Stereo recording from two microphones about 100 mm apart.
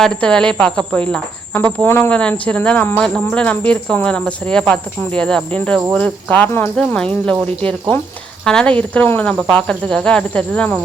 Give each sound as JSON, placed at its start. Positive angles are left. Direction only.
{"t": 0.0, "sound": "speech", "side_deg": 10}
{"t": 1.5, "sound": "speech", "side_deg": 20}